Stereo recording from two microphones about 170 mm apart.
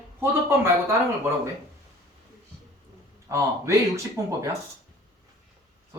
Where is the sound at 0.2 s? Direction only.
15° right (ahead or behind).